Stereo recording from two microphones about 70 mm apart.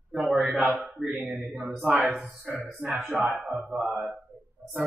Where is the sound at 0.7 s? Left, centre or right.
Centre.